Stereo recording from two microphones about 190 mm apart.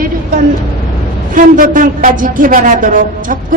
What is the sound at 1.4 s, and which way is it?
A woman's voice, 45° right (ahead or behind).